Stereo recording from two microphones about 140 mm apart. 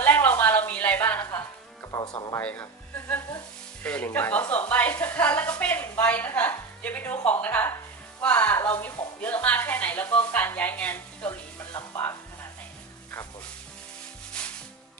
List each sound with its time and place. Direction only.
0.0 s a sound: 15° left (ahead or behind)
1.9 s speech: 30° left (ahead or behind)
2.4 s a woman's voice: 10° left (ahead or behind)
3.8 s a woman's voice: 10° left (ahead or behind)
11.7 s music: 15° left (ahead or behind)
14.4 s music: 5° left (ahead or behind)